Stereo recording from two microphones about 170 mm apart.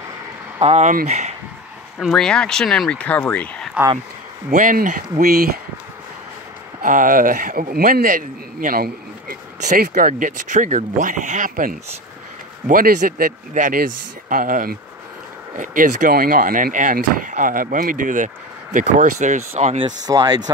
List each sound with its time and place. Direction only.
0.6 s speech: 40° right (ahead or behind)
2.0 s speech: centre (ahead or behind)
4.5 s speech: 55° right (ahead or behind)
6.8 s speech: 50° right (ahead or behind)
20.1 s speech: 20° right (ahead or behind)